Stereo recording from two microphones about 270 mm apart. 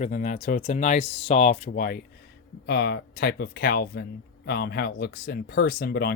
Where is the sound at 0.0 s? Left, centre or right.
Left.